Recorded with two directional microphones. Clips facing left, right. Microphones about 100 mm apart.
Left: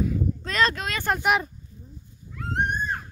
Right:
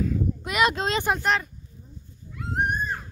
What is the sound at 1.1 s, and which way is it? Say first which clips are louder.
Speech: left 6 dB; 10° left (ahead or behind).